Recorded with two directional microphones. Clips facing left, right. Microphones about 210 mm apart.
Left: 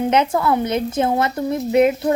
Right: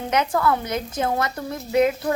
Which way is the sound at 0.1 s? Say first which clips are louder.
Right 1 dB; 25° left (ahead or behind).